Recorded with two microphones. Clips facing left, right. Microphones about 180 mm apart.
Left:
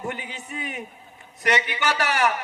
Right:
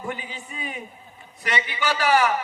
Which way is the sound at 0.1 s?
65° left (ahead or behind).